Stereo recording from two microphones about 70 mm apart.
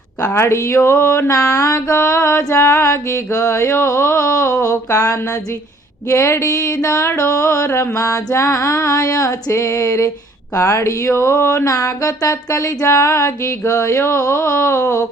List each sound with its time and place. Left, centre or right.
0.3 s music: left